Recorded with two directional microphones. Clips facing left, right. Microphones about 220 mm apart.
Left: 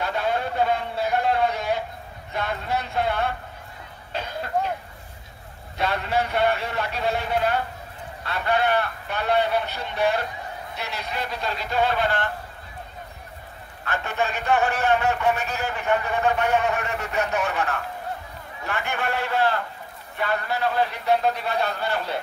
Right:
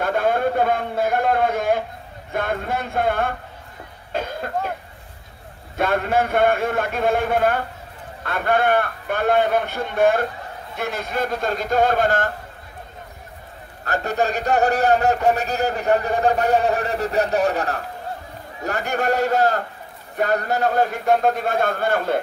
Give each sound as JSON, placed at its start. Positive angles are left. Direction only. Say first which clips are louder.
{"t": 0.0, "sound": "a sound", "louder": "right 6 dB", "side_deg": -50}
{"t": 2.3, "sound": "a man's voice", "louder": "right 3 dB", "side_deg": -50}
{"t": 4.1, "sound": "cough", "louder": "right 2 dB", "side_deg": -50}
{"t": 5.8, "sound": "a man's voice", "louder": "right 5 dB", "side_deg": -50}
{"t": 13.8, "sound": "a man's voice", "louder": "right 5 dB", "side_deg": -40}